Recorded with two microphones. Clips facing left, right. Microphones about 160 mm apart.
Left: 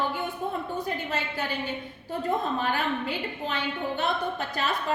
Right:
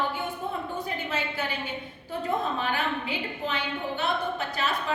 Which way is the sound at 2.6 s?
45° left (ahead or behind).